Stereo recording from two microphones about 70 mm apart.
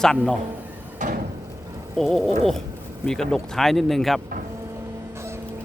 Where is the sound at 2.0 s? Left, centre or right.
Centre.